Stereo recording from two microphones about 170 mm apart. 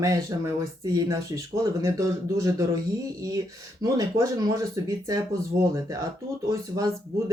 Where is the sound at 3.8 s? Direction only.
20° right (ahead or behind).